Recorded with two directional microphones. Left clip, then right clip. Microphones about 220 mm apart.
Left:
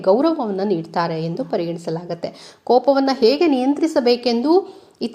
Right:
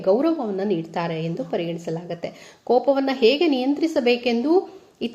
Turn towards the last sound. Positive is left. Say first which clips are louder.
# left 3 dB
turn(degrees=25)  # may be behind; listen again after turning